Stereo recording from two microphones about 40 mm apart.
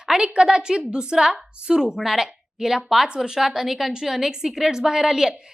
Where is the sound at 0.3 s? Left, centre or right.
Right.